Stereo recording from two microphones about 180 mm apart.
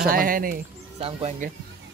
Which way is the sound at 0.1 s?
50° right (ahead or behind).